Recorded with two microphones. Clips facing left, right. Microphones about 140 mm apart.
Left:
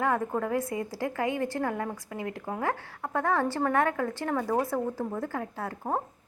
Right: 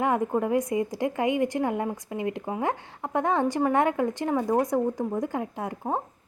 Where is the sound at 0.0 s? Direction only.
20° right (ahead or behind).